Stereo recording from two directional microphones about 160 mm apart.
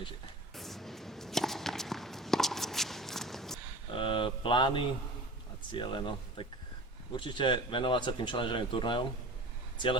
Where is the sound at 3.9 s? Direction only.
30° left (ahead or behind).